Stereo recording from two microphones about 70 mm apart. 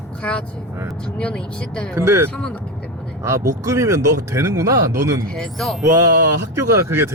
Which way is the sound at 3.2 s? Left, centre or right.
Right.